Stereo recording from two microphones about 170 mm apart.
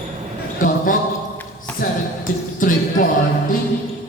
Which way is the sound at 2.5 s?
55° left (ahead or behind).